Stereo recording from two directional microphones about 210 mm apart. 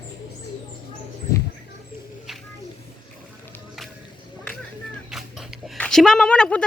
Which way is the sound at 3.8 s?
Centre (ahead or behind).